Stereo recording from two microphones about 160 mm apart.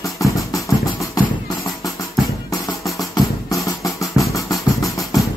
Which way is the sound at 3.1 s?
20° left (ahead or behind).